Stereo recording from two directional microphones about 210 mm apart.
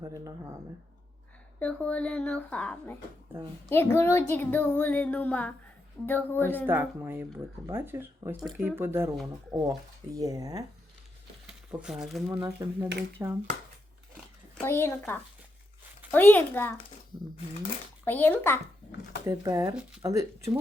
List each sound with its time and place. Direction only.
0.0 s speech: 15° right (ahead or behind)
1.5 s speech: 5° left (ahead or behind)
6.7 s speech: 10° right (ahead or behind)
11.4 s speech: 5° right (ahead or behind)
14.6 s speech: 10° left (ahead or behind)
18.0 s speech: 10° left (ahead or behind)
19.2 s speech: 15° right (ahead or behind)